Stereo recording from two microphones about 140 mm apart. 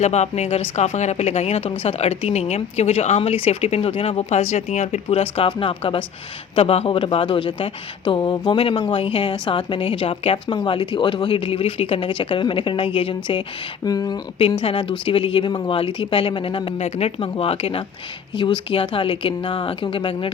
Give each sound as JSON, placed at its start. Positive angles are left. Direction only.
{"t": 0.0, "sound": "speech", "side_deg": 55}
{"t": 13.8, "sound": "speech", "side_deg": 25}
{"t": 14.6, "sound": "speech", "side_deg": 35}